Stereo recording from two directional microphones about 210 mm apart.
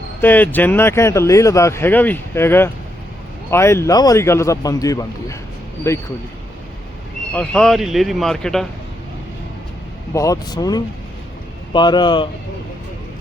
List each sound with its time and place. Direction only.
0.2 s speech: 10° left (ahead or behind)
7.3 s speech: 5° left (ahead or behind)
10.1 s speech: 15° left (ahead or behind)